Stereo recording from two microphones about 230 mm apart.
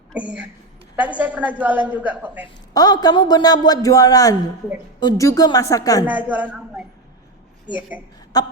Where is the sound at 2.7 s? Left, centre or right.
Centre.